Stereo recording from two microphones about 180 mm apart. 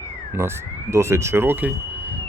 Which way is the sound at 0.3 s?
15° right (ahead or behind).